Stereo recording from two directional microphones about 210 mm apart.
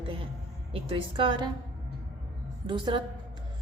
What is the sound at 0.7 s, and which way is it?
Speech, 25° right (ahead or behind).